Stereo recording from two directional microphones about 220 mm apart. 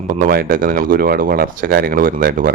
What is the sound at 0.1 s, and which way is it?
A man's voice, 40° right (ahead or behind).